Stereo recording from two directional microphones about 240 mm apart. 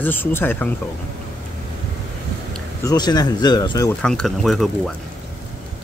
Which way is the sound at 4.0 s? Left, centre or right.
Centre.